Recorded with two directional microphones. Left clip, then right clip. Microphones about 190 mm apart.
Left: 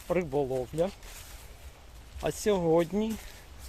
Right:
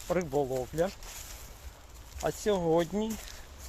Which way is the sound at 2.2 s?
25° left (ahead or behind).